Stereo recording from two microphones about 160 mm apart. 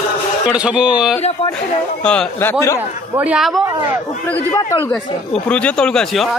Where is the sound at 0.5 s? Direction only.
5° right (ahead or behind).